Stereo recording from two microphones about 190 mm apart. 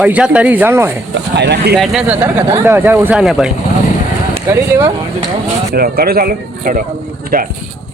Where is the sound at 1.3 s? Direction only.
60° right (ahead or behind).